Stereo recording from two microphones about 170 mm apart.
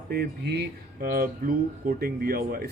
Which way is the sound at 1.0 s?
60° right (ahead or behind).